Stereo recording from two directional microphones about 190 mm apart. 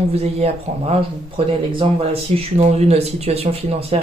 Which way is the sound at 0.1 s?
35° right (ahead or behind).